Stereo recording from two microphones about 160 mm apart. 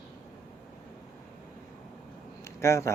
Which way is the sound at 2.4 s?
15° left (ahead or behind).